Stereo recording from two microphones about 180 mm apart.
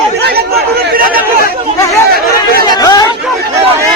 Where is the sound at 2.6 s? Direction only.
20° left (ahead or behind).